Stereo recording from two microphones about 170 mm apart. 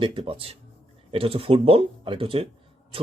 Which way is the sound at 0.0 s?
30° right (ahead or behind).